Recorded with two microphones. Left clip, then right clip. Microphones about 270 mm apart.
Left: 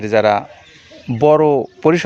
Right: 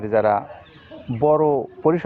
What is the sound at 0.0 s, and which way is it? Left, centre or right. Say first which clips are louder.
Speech: left 5 dB; left.